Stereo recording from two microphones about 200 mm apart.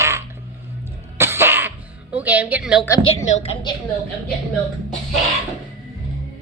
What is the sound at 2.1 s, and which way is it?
Speech, 10° right (ahead or behind).